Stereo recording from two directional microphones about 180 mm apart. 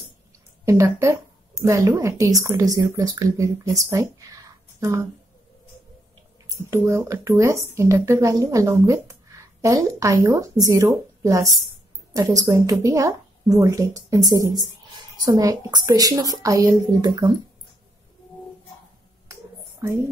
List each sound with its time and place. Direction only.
0.7 s speech: 15° right (ahead or behind)
6.5 s speech: 15° right (ahead or behind)